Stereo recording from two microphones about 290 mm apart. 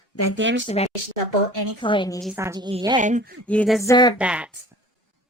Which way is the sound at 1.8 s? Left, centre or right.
Centre.